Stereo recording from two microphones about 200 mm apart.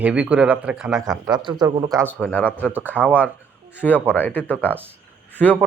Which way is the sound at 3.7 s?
10° left (ahead or behind).